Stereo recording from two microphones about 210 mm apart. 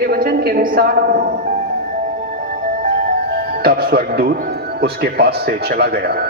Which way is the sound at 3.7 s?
45° right (ahead or behind).